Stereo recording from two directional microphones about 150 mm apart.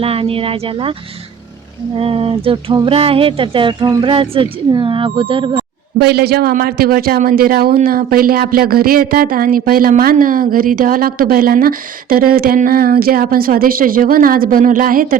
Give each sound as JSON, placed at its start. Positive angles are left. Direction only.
{"t": 0.0, "sound": "speech", "side_deg": -40}
{"t": 2.0, "sound": "speech", "side_deg": -40}
{"t": 6.0, "sound": "speech", "side_deg": -90}
{"t": 7.9, "sound": "speech", "side_deg": -80}